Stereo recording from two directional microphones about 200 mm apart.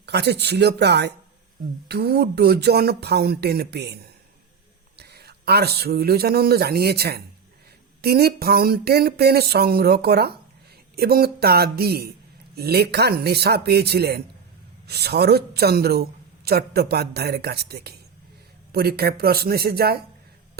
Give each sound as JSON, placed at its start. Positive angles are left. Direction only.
{"t": 0.0, "sound": "a man's voice", "side_deg": -55}